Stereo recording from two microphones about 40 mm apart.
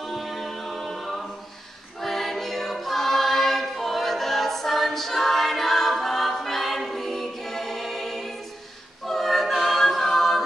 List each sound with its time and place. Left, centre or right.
0.0 s a capella: centre
2.0 s choir: centre
9.0 s a capella: centre